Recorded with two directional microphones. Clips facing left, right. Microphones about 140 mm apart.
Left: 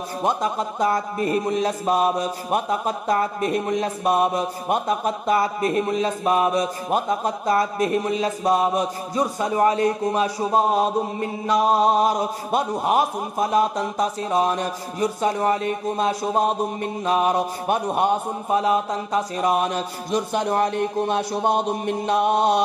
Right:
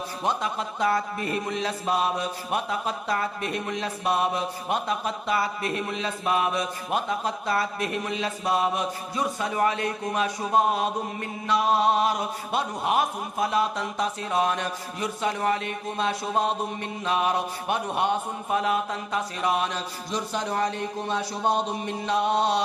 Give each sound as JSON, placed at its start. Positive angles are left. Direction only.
{"t": 0.2, "sound": "mantra", "side_deg": 40}
{"t": 18.5, "sound": "speech", "side_deg": 35}